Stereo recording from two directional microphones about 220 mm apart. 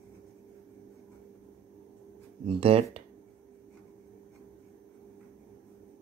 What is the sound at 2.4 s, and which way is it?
Speech, 25° right (ahead or behind).